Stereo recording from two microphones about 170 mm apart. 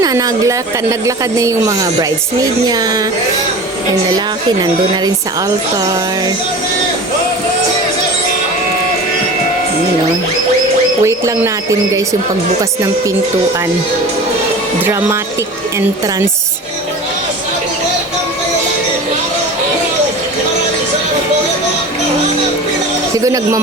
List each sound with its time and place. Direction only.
0.0 s speech: 20° right (ahead or behind)
11.0 s speech: 20° right (ahead or behind)
23.1 s speech: 20° right (ahead or behind)